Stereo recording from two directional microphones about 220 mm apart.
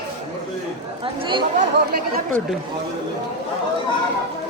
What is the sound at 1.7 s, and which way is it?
Chatter, 45° right (ahead or behind).